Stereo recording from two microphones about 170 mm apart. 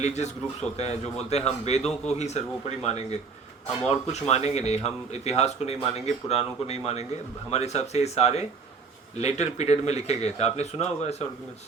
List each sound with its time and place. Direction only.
0.0 s speech: 40° left (ahead or behind)